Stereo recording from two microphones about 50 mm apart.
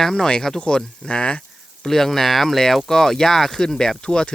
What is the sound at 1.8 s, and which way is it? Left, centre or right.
Speech, centre.